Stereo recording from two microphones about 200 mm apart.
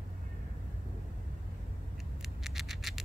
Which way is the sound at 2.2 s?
Centre (ahead or behind).